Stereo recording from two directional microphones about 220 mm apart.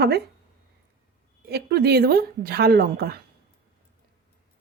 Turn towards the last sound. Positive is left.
turn(degrees=-45)  # may be behind; listen again after turning